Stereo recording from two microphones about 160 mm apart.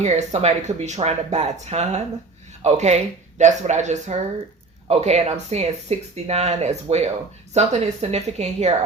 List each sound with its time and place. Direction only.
0.0 s speech: 45° right (ahead or behind)